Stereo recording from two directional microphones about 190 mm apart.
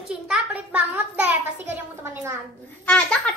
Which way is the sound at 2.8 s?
10° left (ahead or behind).